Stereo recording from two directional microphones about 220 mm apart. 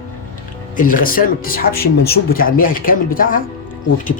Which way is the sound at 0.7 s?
40° left (ahead or behind).